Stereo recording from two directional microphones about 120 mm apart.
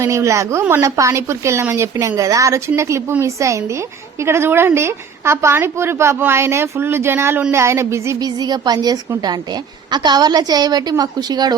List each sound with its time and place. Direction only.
0.0 s a woman's voice: 25° right (ahead or behind)